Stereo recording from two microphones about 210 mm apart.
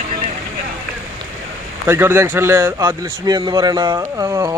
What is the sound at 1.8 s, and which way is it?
A man's voice, 10° right (ahead or behind).